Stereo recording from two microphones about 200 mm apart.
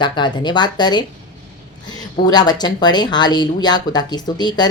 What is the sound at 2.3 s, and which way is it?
Speech, 20° left (ahead or behind).